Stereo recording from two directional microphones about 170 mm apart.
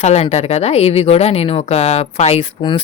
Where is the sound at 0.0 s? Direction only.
40° left (ahead or behind).